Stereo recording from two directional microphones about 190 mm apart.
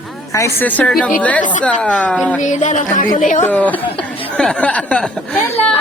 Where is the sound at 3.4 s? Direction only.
10° left (ahead or behind).